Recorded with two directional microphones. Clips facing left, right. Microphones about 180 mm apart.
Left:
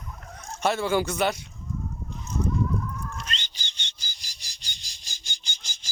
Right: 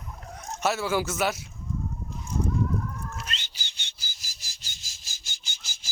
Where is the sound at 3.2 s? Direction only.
5° right (ahead or behind).